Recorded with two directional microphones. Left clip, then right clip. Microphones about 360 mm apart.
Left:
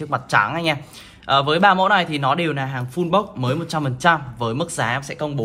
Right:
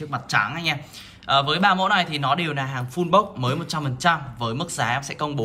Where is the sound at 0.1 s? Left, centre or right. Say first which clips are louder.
Left 5 dB; centre.